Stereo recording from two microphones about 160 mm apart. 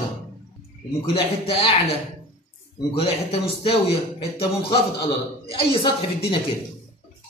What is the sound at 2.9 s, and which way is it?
Speech, 35° left (ahead or behind).